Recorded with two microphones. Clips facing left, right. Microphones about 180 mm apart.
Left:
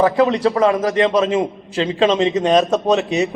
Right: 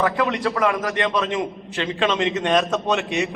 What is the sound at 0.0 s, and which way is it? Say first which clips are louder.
A man's voice: left 7 dB; 30° left (ahead or behind).